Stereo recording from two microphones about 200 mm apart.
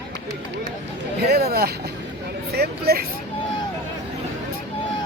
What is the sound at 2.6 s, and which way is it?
Speech, 50° right (ahead or behind).